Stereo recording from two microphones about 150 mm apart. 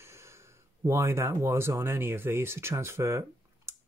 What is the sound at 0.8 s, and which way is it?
Speech, 15° right (ahead or behind).